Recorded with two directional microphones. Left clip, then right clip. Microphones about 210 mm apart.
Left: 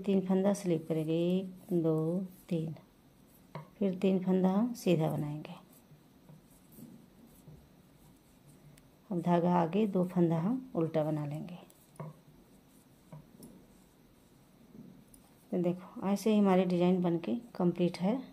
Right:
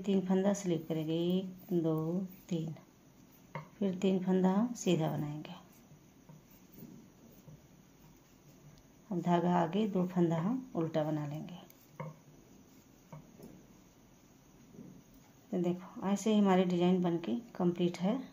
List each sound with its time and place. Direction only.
0.0 s a woman's voice: 25° left (ahead or behind)
3.8 s a woman's voice: 25° left (ahead or behind)
9.1 s a woman's voice: 25° left (ahead or behind)
15.5 s a woman's voice: 25° left (ahead or behind)